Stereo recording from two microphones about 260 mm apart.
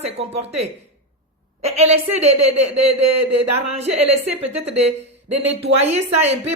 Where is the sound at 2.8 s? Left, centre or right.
Right.